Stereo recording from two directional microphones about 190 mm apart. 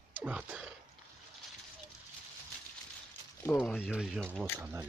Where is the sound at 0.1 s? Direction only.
5° right (ahead or behind).